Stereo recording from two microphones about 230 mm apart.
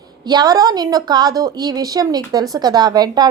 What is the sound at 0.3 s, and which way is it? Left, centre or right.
A woman's voice, centre.